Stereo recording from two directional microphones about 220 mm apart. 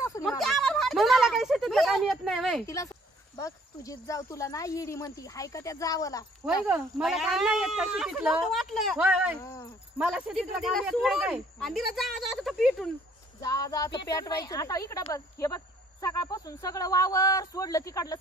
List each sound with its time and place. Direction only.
0.2 s a sound: centre (ahead or behind)
2.6 s speech: 15° left (ahead or behind)
6.6 s speech: 5° right (ahead or behind)
9.4 s speech: 20° left (ahead or behind)
9.9 s speech: 5° right (ahead or behind)
13.4 s speech: 15° left (ahead or behind)